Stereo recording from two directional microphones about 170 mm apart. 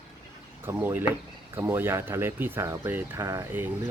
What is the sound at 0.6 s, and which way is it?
Speech, 10° right (ahead or behind).